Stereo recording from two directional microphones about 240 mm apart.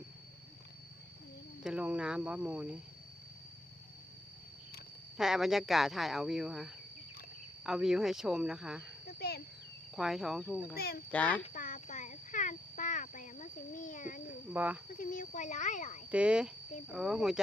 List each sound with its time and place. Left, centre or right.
1.6 s speech: centre
5.1 s speech: centre
9.0 s a sound: left
9.9 s speech: centre
10.8 s speech: left
11.1 s speech: centre
11.5 s a sound: left
14.5 s speech: centre
14.9 s speech: left
16.1 s speech: centre